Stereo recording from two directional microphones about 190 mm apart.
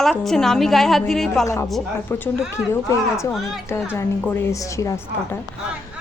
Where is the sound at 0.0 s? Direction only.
Centre (ahead or behind).